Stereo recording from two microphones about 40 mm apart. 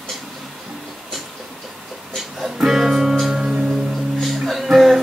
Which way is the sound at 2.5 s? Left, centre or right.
Centre.